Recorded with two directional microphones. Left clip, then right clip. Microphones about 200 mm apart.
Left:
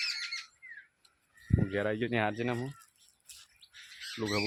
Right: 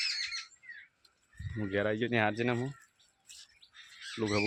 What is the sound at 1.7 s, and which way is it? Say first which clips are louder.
Speech: right 2 dB; 5° right (ahead or behind).